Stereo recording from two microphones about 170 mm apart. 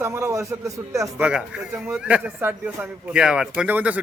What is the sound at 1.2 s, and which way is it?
A man's voice, 5° right (ahead or behind).